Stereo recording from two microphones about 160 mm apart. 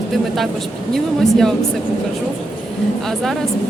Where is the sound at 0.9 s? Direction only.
5° left (ahead or behind).